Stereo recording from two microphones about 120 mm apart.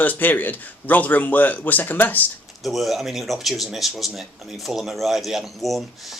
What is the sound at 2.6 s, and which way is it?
Speech, centre (ahead or behind).